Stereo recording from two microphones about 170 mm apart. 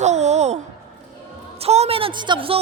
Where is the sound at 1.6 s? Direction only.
35° right (ahead or behind).